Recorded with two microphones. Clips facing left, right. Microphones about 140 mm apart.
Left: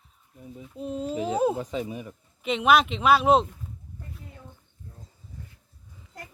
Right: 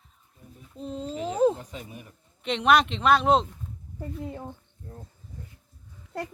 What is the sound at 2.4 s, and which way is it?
A woman's voice, 5° left (ahead or behind).